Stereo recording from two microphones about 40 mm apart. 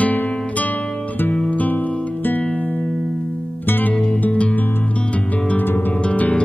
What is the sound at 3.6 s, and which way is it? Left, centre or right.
Music, left.